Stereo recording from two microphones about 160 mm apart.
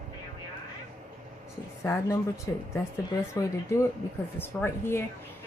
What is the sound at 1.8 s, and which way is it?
Speech, 15° left (ahead or behind).